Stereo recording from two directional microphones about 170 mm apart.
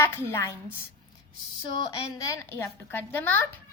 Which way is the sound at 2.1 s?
15° left (ahead or behind).